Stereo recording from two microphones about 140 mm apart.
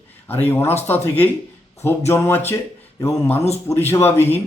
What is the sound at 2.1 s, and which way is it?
Speech, 15° left (ahead or behind).